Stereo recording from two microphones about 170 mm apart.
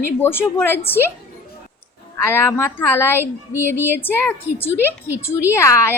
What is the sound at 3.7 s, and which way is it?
Speech, 15° right (ahead or behind).